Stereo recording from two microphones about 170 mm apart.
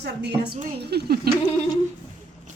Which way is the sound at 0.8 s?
75° right (ahead or behind).